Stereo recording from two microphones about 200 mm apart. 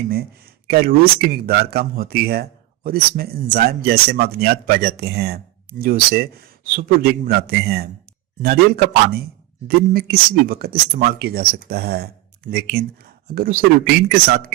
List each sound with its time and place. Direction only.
0.7 s speech: 50° right (ahead or behind)